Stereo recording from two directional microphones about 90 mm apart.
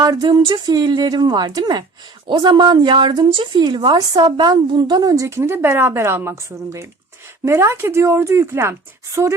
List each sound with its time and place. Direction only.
0.0 s a woman's voice: 50° right (ahead or behind); by 9.3 s 30° right (ahead or behind)